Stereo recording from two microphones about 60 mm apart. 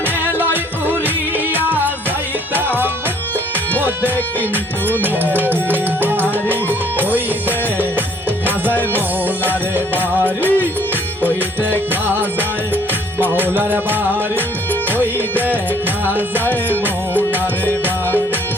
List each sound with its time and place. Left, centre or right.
0.5 s music: right
8.4 s music: right
11.7 s music: right